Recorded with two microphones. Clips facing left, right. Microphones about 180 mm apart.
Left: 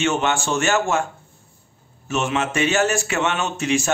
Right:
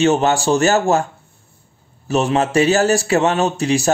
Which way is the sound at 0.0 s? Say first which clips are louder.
Right 6 dB; 35° right (ahead or behind).